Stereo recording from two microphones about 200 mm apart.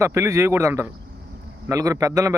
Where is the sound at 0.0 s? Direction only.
15° right (ahead or behind).